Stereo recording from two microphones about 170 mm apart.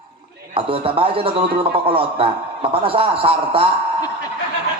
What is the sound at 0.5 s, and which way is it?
A man's voice, 30° right (ahead or behind).